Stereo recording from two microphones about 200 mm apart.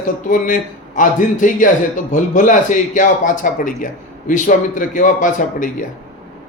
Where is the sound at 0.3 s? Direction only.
40° left (ahead or behind).